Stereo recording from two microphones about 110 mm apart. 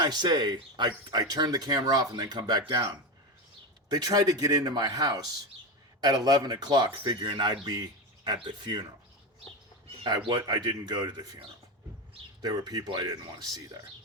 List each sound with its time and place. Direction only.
0.0 s speech: 40° right (ahead or behind)
10.2 s speech: 40° right (ahead or behind)
12.4 s speech: 35° right (ahead or behind)